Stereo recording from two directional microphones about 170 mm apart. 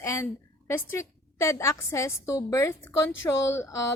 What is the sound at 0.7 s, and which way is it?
A woman's voice, 15° left (ahead or behind).